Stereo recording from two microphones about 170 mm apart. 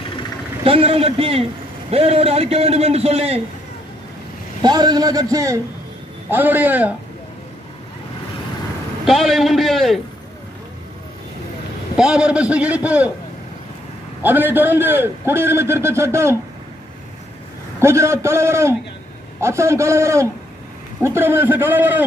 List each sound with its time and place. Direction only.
0.7 s a man's voice: 35° right (ahead or behind)
4.6 s a man's voice: 25° right (ahead or behind)
9.0 s a man's voice: centre (ahead or behind)
12.0 s a man's voice: 5° right (ahead or behind)
14.2 s a man's voice: 10° right (ahead or behind)
17.7 s a man's voice: 15° right (ahead or behind)